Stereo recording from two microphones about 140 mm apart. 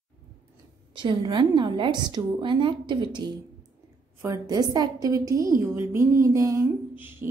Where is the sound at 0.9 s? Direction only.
35° right (ahead or behind).